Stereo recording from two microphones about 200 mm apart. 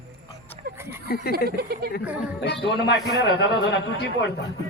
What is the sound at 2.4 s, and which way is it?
A man's voice, 60° left (ahead or behind).